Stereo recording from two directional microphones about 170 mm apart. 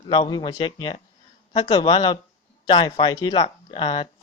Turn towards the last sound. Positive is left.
turn(degrees=30)  # may be behind; listen again after turning